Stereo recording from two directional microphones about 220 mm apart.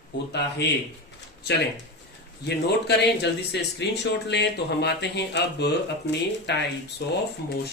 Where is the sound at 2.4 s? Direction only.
50° left (ahead or behind).